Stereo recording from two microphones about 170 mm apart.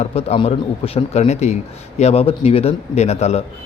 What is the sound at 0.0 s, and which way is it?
Speech, 35° left (ahead or behind).